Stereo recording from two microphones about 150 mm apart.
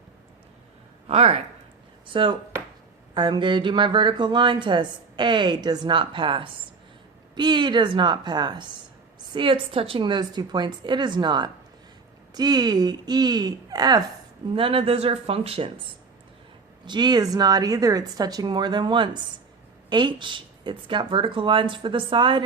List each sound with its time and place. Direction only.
1.0 s a woman's voice: 40° right (ahead or behind)
16.8 s a woman's voice: 30° right (ahead or behind)